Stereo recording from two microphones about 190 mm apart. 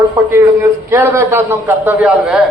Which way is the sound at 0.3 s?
15° right (ahead or behind).